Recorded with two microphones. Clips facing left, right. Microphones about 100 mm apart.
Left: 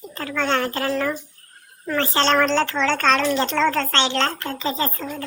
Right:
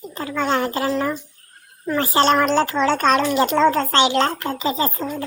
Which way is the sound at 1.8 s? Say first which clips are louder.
Right 3 dB; 15° right (ahead or behind).